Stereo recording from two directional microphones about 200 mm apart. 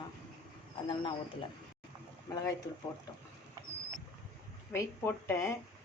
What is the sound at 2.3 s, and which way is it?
Speech, 15° left (ahead or behind).